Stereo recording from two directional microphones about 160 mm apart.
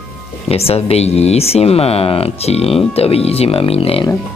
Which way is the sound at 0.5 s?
40° left (ahead or behind).